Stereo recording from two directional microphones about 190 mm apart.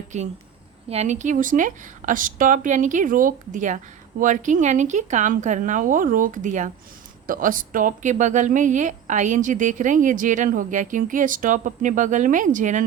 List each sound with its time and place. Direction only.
0.1 s speech: 35° right (ahead or behind)